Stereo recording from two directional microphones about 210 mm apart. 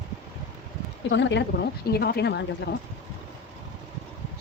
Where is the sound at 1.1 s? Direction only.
55° left (ahead or behind).